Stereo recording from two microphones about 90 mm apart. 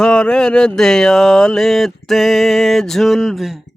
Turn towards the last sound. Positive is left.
turn(degrees=0)  # may be behind; listen again after turning